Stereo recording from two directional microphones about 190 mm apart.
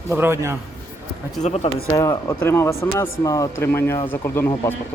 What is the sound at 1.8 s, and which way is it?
Speech, 20° left (ahead or behind).